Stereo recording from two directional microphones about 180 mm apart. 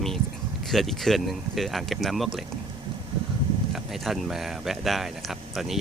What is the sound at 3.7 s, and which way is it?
Speech, centre (ahead or behind).